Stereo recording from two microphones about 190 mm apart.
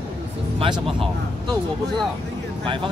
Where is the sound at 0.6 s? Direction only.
30° right (ahead or behind).